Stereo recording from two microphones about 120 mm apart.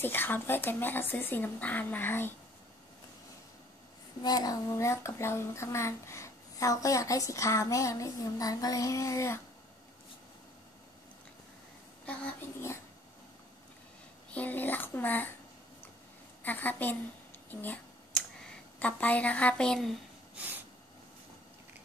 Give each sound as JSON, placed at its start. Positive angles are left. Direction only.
{"t": 0.0, "sound": "speech", "side_deg": 15}
{"t": 4.2, "sound": "speech", "side_deg": 35}
{"t": 12.1, "sound": "speech", "side_deg": 10}
{"t": 14.3, "sound": "speech", "side_deg": 15}
{"t": 16.4, "sound": "speech", "side_deg": 15}
{"t": 17.5, "sound": "a sound", "side_deg": 15}
{"t": 18.8, "sound": "speech", "side_deg": 10}